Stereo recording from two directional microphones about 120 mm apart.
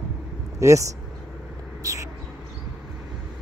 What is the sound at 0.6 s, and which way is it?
Speech, 25° right (ahead or behind).